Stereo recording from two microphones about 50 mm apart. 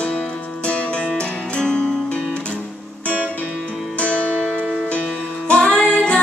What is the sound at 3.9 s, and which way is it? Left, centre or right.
Music, left.